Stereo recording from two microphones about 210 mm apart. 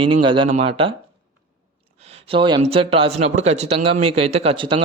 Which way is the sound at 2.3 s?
20° right (ahead or behind).